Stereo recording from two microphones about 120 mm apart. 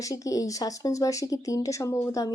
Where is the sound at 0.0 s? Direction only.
30° left (ahead or behind).